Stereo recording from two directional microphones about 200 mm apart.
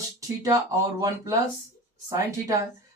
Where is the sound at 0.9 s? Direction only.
15° right (ahead or behind).